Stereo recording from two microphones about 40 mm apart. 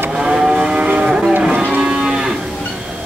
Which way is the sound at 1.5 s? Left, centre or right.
Right.